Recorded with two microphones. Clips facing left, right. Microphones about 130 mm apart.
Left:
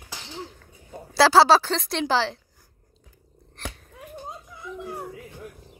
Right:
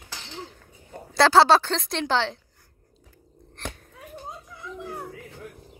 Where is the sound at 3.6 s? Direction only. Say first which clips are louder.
Even; 5° left (ahead or behind).